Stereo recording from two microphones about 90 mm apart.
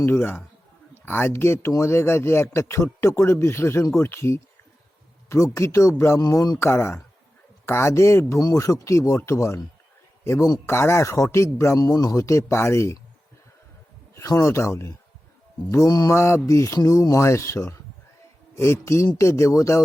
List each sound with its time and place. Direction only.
0.0 s a man's voice: 25° left (ahead or behind)
6.2 s a man's voice: 40° left (ahead or behind)
6.6 s a man's voice: 25° left (ahead or behind)
10.7 s a man's voice: 30° left (ahead or behind)
14.2 s a man's voice: 35° left (ahead or behind)